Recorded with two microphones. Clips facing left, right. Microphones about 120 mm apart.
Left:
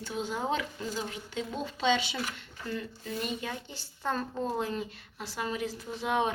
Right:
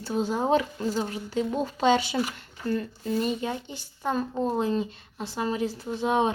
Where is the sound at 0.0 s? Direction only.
35° right (ahead or behind).